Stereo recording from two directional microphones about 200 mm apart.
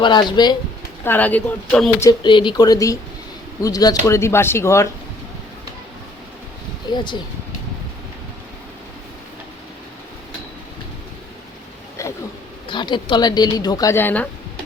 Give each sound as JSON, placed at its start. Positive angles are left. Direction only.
{"t": 0.0, "sound": "speech", "side_deg": 20}
{"t": 1.0, "sound": "speech", "side_deg": 10}
{"t": 2.0, "sound": "speech", "side_deg": 25}
{"t": 6.8, "sound": "speech", "side_deg": 20}
{"t": 12.0, "sound": "a sound", "side_deg": 15}
{"t": 12.6, "sound": "speech", "side_deg": 25}